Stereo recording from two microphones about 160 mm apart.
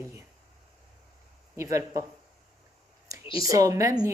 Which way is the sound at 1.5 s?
20° right (ahead or behind).